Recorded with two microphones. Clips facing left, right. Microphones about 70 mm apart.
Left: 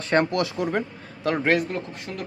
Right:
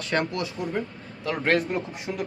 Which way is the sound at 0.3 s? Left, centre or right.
Left.